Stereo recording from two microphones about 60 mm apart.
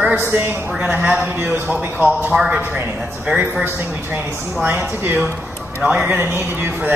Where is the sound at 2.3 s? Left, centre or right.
Centre.